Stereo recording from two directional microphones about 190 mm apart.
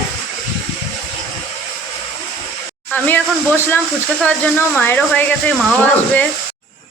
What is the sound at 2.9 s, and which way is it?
Speech, 10° left (ahead or behind).